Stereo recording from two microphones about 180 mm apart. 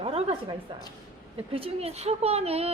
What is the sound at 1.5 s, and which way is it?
Speech, 35° right (ahead or behind).